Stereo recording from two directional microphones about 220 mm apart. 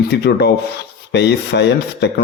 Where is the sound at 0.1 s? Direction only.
50° left (ahead or behind).